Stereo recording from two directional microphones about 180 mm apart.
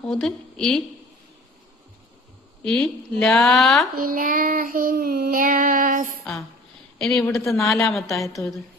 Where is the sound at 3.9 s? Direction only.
50° right (ahead or behind).